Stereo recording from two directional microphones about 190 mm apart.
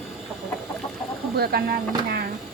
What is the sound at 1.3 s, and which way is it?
Speech, 55° right (ahead or behind).